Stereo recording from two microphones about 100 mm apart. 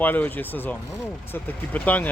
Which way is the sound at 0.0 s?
20° left (ahead or behind).